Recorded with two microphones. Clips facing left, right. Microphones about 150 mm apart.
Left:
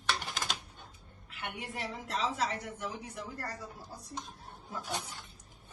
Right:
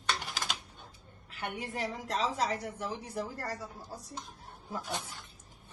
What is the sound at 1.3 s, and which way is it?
A woman's voice, 40° right (ahead or behind).